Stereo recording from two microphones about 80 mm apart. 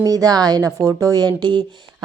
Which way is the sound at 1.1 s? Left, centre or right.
Right.